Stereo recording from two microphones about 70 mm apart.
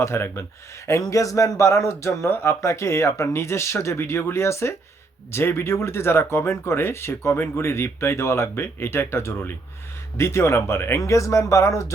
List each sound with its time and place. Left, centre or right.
0.0 s speech: left
0.9 s a man's voice: left
11.0 s a man's voice: left